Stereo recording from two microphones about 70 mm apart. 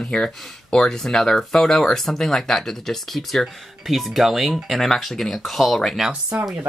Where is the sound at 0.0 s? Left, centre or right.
Centre.